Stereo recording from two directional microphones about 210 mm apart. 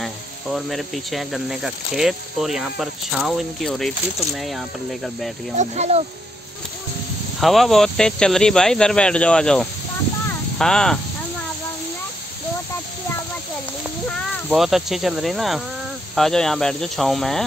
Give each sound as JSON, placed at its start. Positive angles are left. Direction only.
{"t": 0.0, "sound": "speech", "side_deg": 0}
{"t": 5.6, "sound": "speech", "side_deg": -30}
{"t": 7.3, "sound": "speech", "side_deg": 0}
{"t": 14.1, "sound": "speech", "side_deg": 0}